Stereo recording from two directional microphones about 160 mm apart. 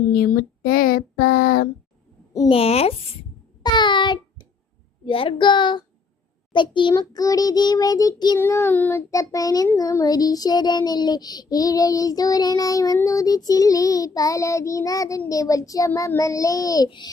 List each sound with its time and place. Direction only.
0.1 s child singing: 65° left (ahead or behind)
2.5 s speech: 40° left (ahead or behind)
3.6 s a sound: 25° left (ahead or behind)
5.0 s child singing: 30° left (ahead or behind)